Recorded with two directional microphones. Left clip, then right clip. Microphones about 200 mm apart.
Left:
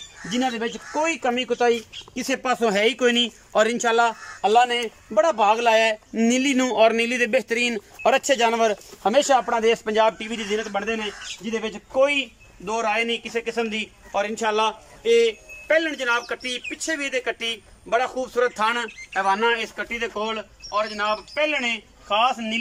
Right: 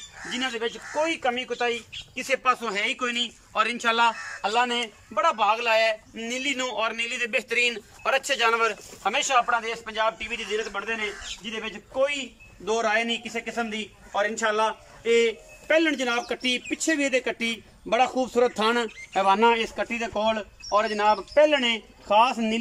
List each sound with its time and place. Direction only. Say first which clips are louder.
0.3 s speech: left 4 dB; 30° left (ahead or behind)
11.4 s speech: left 7 dB; 20° left (ahead or behind)
15.7 s speech: left 2 dB; 10° right (ahead or behind)